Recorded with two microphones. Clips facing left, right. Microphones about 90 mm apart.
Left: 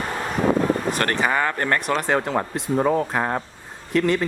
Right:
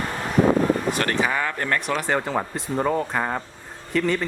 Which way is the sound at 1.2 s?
5° left (ahead or behind).